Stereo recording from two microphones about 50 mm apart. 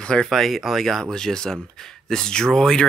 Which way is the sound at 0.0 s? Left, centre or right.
Centre.